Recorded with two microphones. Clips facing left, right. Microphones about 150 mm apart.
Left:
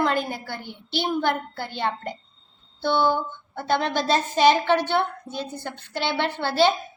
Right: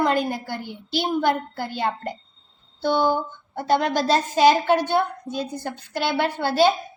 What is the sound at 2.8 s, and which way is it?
Speech, 45° right (ahead or behind).